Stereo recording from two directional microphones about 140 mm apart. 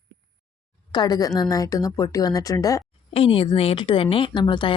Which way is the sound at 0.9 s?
30° left (ahead or behind).